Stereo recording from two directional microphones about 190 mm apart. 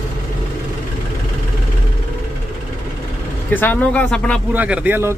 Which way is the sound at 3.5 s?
10° left (ahead or behind).